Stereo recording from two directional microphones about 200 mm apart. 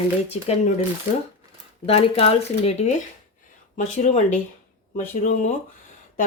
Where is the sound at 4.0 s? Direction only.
35° left (ahead or behind).